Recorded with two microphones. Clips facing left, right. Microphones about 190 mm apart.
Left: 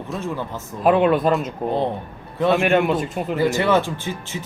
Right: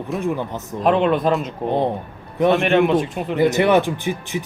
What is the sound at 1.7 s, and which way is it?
Speech, 15° right (ahead or behind).